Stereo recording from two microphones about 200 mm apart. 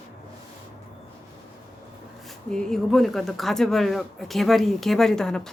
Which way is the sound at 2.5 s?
5° left (ahead or behind).